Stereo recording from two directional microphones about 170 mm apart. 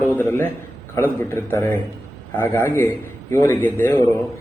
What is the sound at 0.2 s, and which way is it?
A man's voice, 10° left (ahead or behind).